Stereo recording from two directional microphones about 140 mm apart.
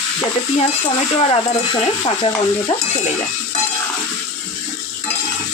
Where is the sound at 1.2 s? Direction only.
45° left (ahead or behind).